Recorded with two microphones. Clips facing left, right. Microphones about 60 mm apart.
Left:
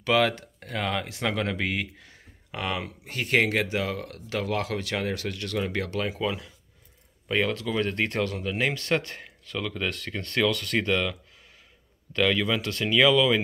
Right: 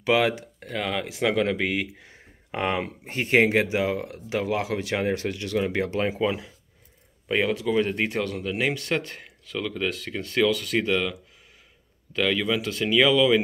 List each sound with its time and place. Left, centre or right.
0.0 s speech: centre
0.7 s speech: centre
2.0 s speech: right; by 13.4 s centre